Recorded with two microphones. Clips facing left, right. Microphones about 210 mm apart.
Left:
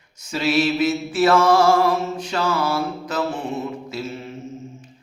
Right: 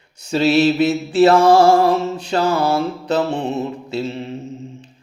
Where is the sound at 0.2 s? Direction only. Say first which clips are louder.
Right 6 dB; 30° right (ahead or behind).